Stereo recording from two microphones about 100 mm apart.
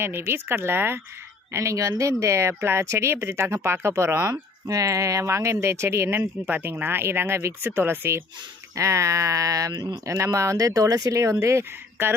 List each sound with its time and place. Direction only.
0.0 s speech: 25° right (ahead or behind)
4.3 s speech: 35° right (ahead or behind)